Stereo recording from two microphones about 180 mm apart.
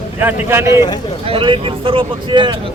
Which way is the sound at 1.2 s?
30° right (ahead or behind).